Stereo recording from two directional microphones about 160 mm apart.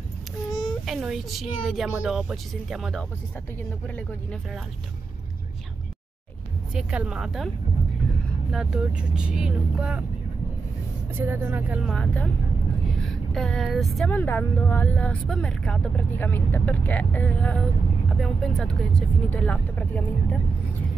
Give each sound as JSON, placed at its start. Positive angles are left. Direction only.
{"t": 0.5, "sound": "a sound", "side_deg": 25}
{"t": 0.8, "sound": "a woman's voice", "side_deg": 0}
{"t": 6.7, "sound": "a woman's voice", "side_deg": -5}
{"t": 11.1, "sound": "speech", "side_deg": -15}
{"t": 11.8, "sound": "a woman's voice", "side_deg": 5}